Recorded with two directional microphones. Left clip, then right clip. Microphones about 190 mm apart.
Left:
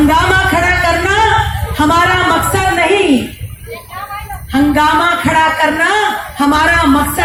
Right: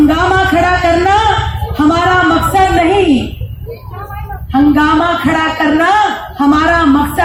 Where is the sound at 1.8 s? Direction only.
Centre (ahead or behind).